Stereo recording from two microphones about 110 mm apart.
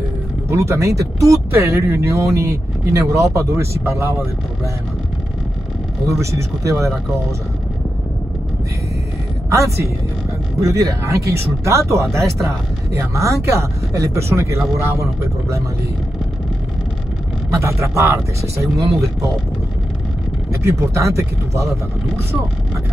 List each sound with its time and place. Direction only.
0.5 s speech: 25° right (ahead or behind)
6.0 s speech: 30° right (ahead or behind)
9.5 s speech: 25° right (ahead or behind)
17.5 s speech: 25° right (ahead or behind)
20.6 s speech: 25° right (ahead or behind)